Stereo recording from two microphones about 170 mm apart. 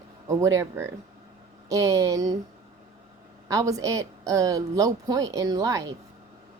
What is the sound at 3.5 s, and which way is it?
Speech, 20° right (ahead or behind).